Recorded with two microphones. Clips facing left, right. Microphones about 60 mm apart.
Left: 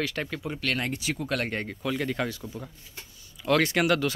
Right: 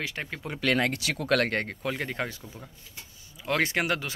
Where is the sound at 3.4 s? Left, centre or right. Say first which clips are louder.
Left 4 dB; right.